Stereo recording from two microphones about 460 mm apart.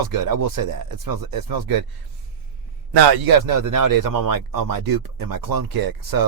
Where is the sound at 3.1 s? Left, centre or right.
Right.